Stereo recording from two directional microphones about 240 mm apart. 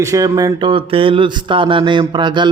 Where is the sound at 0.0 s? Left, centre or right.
Centre.